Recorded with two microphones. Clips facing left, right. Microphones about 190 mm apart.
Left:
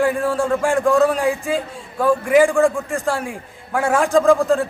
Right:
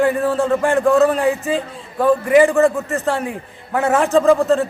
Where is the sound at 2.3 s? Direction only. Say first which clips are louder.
Right 1 dB; centre (ahead or behind).